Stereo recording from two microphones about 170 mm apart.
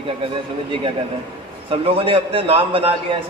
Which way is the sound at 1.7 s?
30° right (ahead or behind).